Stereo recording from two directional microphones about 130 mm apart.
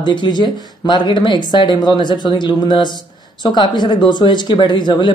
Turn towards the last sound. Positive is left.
turn(degrees=35)  # may be behind; listen again after turning